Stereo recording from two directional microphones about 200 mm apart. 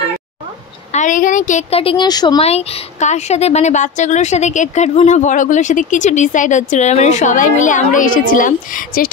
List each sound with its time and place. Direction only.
0.9 s speech: 40° left (ahead or behind)